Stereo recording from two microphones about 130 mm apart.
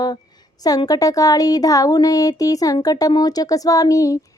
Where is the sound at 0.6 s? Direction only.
30° left (ahead or behind).